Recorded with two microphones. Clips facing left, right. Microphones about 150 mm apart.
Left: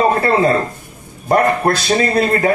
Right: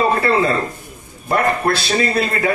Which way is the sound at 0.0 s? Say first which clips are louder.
Left 3 dB; 40° left (ahead or behind).